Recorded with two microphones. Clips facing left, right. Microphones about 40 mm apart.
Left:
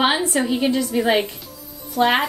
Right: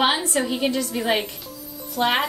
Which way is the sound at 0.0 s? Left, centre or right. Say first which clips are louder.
Left 2 dB; centre.